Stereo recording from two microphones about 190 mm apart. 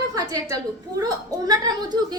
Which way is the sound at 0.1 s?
20° right (ahead or behind).